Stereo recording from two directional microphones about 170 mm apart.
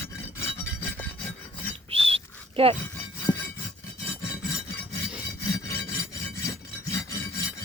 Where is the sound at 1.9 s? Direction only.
35° right (ahead or behind).